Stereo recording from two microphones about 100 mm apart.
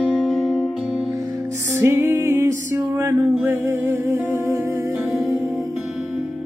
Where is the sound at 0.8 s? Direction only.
10° right (ahead or behind).